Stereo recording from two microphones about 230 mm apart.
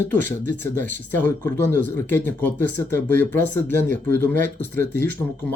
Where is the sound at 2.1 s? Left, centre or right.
Centre.